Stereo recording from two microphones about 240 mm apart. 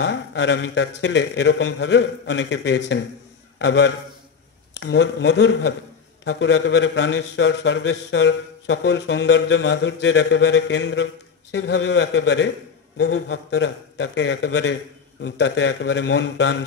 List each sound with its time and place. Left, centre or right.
0.0 s a man's voice: left